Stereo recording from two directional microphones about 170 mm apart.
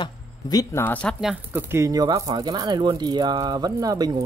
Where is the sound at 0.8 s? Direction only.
10° left (ahead or behind).